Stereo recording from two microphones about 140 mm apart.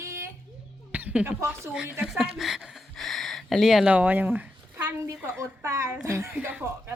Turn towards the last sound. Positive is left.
turn(degrees=-15)  # may be behind; listen again after turning